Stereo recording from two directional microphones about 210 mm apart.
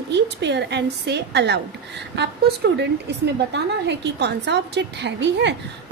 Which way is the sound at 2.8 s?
55° right (ahead or behind).